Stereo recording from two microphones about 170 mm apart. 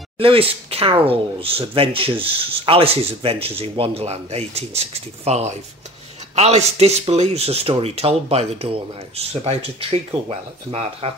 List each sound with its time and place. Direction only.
0.2 s speech: 35° right (ahead or behind)